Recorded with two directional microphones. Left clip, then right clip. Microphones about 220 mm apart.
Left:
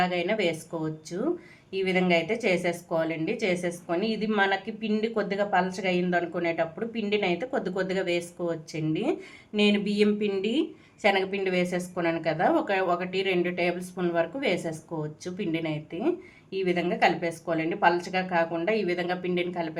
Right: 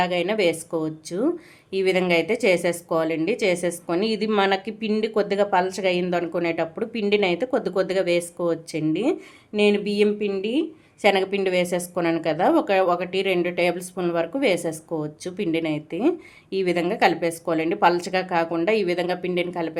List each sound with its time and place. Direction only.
0.0 s a woman's voice: 30° right (ahead or behind)